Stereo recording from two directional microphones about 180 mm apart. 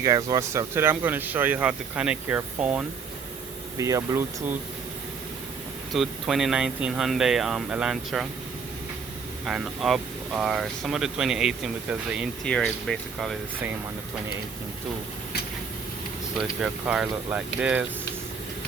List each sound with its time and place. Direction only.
0.0 s speech: 20° right (ahead or behind)
3.8 s speech: 15° right (ahead or behind)
5.9 s speech: centre (ahead or behind)
9.5 s speech: centre (ahead or behind)
16.4 s speech: 5° right (ahead or behind)